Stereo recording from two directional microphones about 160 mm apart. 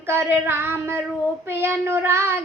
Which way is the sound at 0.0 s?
15° right (ahead or behind).